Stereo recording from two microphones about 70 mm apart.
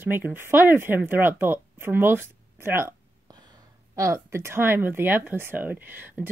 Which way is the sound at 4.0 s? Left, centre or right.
Right.